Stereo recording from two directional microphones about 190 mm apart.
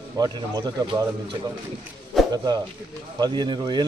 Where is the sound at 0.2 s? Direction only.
20° right (ahead or behind).